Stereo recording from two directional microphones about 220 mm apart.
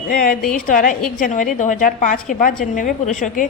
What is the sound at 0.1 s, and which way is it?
A woman's voice, 40° left (ahead or behind).